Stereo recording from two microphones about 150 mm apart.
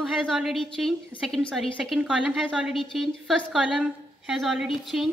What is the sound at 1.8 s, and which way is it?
A woman's voice, 5° right (ahead or behind).